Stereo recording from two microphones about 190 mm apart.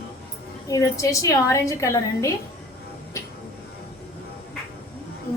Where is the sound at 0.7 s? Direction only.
20° left (ahead or behind).